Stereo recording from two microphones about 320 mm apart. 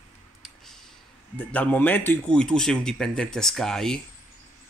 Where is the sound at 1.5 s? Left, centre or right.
Centre.